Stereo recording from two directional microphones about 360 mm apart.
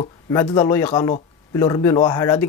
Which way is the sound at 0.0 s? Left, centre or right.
Centre.